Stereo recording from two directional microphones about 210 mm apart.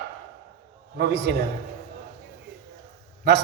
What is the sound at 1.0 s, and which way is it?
Speech, 55° right (ahead or behind).